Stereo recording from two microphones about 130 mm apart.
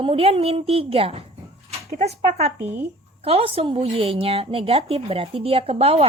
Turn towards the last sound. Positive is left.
turn(degrees=-50)  # may be behind; listen again after turning